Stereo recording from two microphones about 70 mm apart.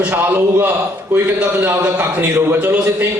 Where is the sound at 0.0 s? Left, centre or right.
Right.